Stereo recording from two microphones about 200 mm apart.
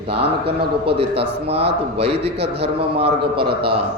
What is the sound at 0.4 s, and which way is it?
Speech, 55° right (ahead or behind).